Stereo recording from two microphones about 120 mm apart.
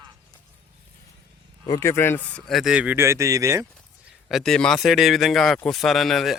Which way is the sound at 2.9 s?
25° right (ahead or behind).